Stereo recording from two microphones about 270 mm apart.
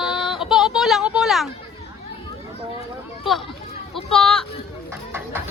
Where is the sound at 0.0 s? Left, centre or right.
Centre.